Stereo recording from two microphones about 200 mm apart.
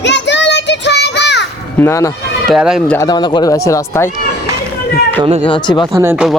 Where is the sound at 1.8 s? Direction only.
15° left (ahead or behind).